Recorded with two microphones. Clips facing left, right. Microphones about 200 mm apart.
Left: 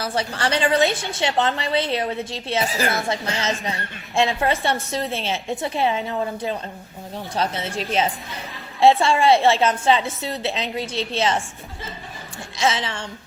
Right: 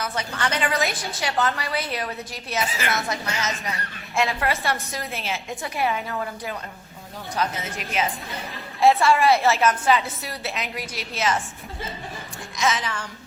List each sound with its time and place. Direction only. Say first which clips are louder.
0.0 s a woman's voice: left 3 dB; 30° left (ahead or behind)
12.5 s a woman's voice: left 2 dB; 30° left (ahead or behind)